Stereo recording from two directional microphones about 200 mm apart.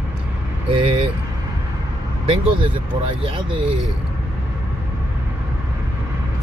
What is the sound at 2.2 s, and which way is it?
Speech, 25° right (ahead or behind).